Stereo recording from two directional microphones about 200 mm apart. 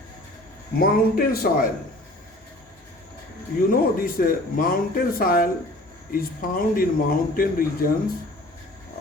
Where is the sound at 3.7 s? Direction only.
45° left (ahead or behind).